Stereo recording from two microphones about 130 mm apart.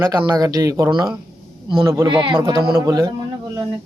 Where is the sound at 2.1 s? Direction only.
40° right (ahead or behind).